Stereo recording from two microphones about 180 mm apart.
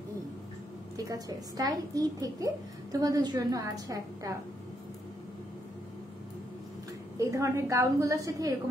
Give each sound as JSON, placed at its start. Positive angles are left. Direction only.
{"t": 0.9, "sound": "a woman's voice", "side_deg": -20}
{"t": 7.2, "sound": "a woman's voice", "side_deg": -15}